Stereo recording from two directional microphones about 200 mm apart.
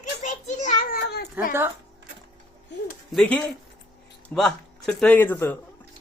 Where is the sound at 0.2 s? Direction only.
40° left (ahead or behind).